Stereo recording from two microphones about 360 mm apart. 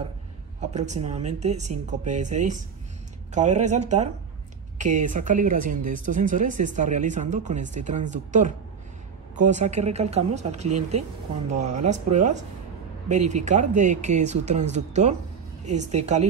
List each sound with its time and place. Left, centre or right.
0.6 s speech: centre